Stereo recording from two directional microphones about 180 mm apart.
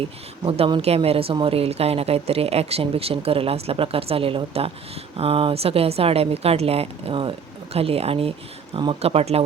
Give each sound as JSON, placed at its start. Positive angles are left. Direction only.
{"t": 0.0, "sound": "a woman's voice", "side_deg": -30}